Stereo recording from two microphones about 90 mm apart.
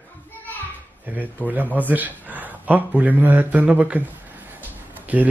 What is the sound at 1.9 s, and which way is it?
Speech, 20° right (ahead or behind).